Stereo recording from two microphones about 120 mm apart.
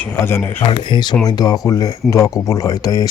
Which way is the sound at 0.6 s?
40° left (ahead or behind).